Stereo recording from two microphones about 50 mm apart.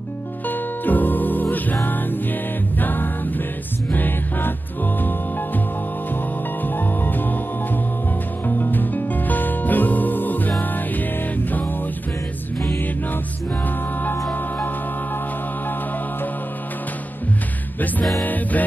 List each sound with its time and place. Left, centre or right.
0.5 s music: left
2.8 s music: left
6.6 s music: left
8.5 s music: left
18.2 s music: left